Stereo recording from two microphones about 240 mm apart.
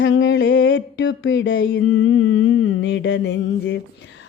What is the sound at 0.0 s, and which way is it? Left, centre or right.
Mantra, left.